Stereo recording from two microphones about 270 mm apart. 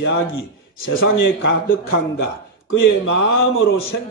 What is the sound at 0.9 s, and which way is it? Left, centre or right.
Speech, left.